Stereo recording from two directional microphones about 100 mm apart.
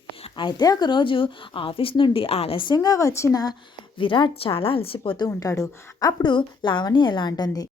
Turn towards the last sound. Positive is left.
turn(degrees=40)  # may be behind; listen again after turning